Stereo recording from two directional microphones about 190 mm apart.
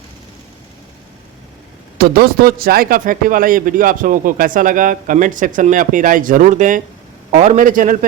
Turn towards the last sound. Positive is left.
turn(degrees=-45)  # may be behind; listen again after turning